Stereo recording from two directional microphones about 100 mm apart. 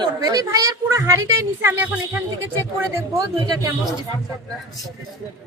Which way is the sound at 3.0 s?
30° right (ahead or behind).